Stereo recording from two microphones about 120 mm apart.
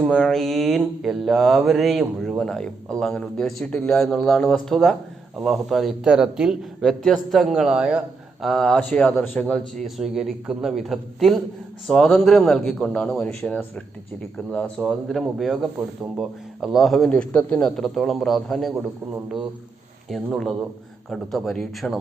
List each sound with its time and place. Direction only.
0.1 s a man's voice: 5° left (ahead or behind)
20.1 s a man's voice: centre (ahead or behind)